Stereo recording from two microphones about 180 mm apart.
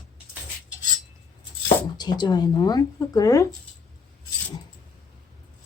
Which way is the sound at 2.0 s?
25° left (ahead or behind).